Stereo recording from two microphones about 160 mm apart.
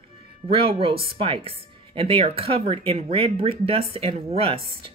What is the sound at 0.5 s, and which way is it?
Speech, 35° right (ahead or behind).